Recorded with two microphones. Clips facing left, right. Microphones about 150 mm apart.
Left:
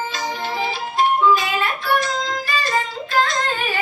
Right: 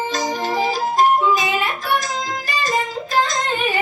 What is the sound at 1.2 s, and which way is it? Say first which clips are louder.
Music: left 1 dB; 15° right (ahead or behind).